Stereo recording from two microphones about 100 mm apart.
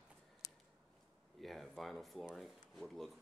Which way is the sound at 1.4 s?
Centre (ahead or behind).